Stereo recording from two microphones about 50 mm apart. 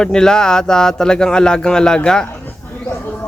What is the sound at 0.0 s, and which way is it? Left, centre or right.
Speech, centre.